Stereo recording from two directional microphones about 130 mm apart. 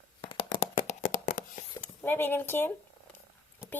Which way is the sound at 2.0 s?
15° left (ahead or behind).